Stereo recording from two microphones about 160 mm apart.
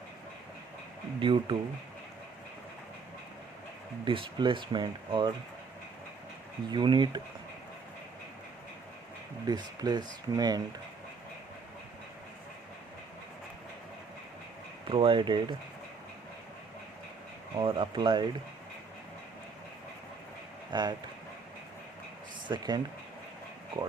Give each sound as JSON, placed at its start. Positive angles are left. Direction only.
{"t": 1.2, "sound": "speech", "side_deg": -30}
{"t": 4.0, "sound": "speech", "side_deg": -30}
{"t": 6.7, "sound": "speech", "side_deg": -30}
{"t": 9.5, "sound": "speech", "side_deg": -25}
{"t": 14.8, "sound": "speech", "side_deg": -30}
{"t": 17.6, "sound": "speech", "side_deg": -30}
{"t": 20.7, "sound": "speech", "side_deg": -30}
{"t": 22.4, "sound": "speech", "side_deg": -25}